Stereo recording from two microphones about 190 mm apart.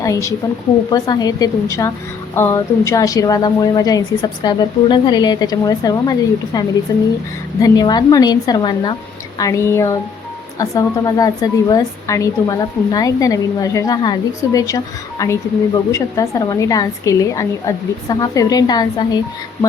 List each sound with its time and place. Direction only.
0.0 s a woman's voice: 15° left (ahead or behind)
15.9 s speech: 15° left (ahead or behind)